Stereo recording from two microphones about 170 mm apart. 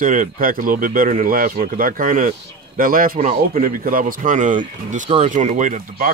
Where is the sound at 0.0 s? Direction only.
50° right (ahead or behind).